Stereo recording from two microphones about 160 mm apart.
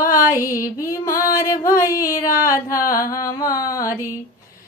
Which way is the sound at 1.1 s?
60° left (ahead or behind).